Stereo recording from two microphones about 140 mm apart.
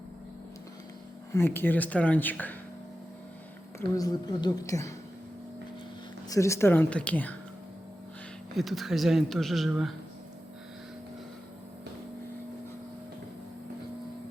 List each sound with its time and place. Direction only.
1.3 s speech: 15° left (ahead or behind)
3.8 s a woman's voice: 25° left (ahead or behind)
6.2 s speech: 25° left (ahead or behind)
8.5 s speech: centre (ahead or behind)